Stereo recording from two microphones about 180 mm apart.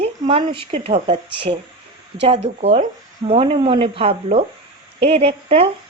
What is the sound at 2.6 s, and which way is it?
A woman's voice, 35° right (ahead or behind).